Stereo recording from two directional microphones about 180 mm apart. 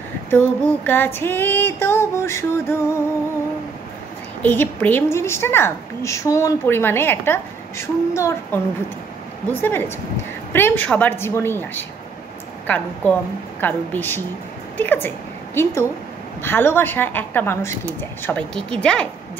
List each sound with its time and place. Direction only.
0.8 s a woman's voice: 10° left (ahead or behind)
4.4 s a woman's voice: 10° left (ahead or behind)